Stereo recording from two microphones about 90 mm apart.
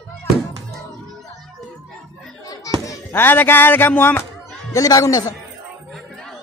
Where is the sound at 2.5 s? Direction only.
40° left (ahead or behind).